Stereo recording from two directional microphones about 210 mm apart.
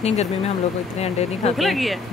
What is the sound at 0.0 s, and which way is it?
Speech, 30° left (ahead or behind).